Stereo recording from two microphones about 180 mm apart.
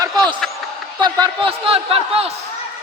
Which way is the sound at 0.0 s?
25° right (ahead or behind).